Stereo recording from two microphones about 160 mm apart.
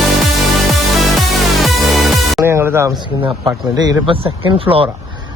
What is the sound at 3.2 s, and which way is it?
Speech, 25° right (ahead or behind).